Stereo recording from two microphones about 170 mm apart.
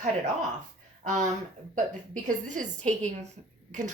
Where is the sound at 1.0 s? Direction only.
45° right (ahead or behind).